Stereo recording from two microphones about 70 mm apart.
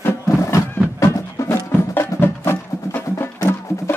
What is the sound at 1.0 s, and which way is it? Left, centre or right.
Music, left.